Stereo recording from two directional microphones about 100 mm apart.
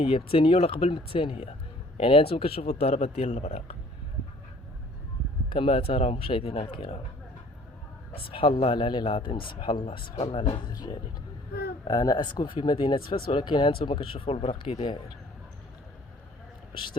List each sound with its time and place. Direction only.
0.0 s speech: 70° left (ahead or behind); by 3.8 s 90° left
5.5 s speech: 60° left (ahead or behind)
8.1 s speech: 65° left (ahead or behind)
10.7 s speech: 45° left (ahead or behind); by 14.8 s 70° left (ahead or behind)
16.7 s speech: 55° left (ahead or behind)